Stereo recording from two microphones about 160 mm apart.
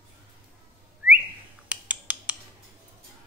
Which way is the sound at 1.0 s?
5° right (ahead or behind).